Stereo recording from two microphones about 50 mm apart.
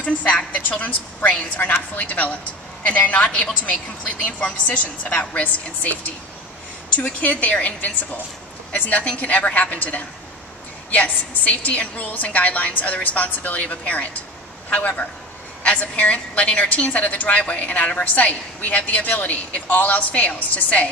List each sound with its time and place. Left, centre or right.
0.0 s a woman's voice: left
3.3 s a woman's voice: centre
4.2 s a woman's voice: left
7.0 s a woman's voice: left